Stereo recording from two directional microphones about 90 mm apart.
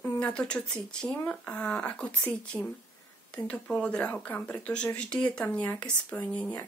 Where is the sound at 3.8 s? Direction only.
15° left (ahead or behind).